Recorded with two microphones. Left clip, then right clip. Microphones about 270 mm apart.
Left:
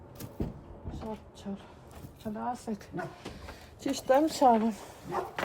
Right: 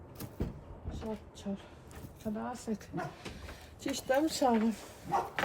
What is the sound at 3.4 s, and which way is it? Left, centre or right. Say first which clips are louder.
Speech: left 3 dB; left.